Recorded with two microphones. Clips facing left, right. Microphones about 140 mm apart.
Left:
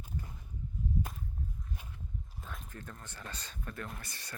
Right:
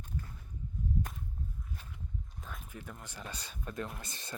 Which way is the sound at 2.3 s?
Centre (ahead or behind).